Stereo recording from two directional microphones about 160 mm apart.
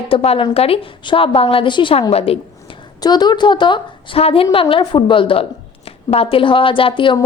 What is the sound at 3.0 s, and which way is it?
A woman's voice, 25° left (ahead or behind).